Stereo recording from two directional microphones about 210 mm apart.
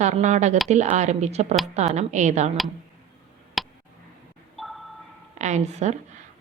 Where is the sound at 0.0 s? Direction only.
35° right (ahead or behind).